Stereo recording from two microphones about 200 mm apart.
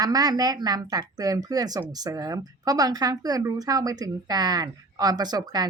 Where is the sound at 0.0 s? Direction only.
20° right (ahead or behind).